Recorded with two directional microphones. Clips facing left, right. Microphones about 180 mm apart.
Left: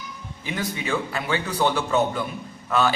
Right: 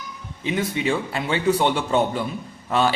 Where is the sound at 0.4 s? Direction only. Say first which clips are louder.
Right 6 dB; 25° right (ahead or behind).